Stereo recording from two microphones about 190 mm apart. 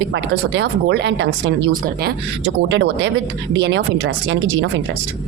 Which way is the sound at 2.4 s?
90° right.